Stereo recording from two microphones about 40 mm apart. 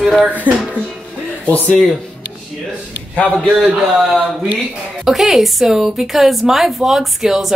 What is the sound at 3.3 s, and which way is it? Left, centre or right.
A man's voice, centre.